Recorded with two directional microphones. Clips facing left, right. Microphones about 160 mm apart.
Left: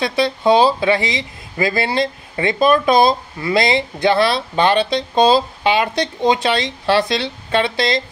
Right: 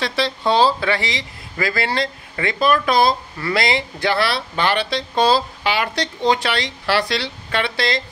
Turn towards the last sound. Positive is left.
turn(degrees=20)  # may be behind; listen again after turning